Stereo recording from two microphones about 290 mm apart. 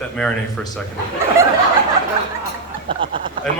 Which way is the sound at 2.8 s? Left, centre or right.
Centre.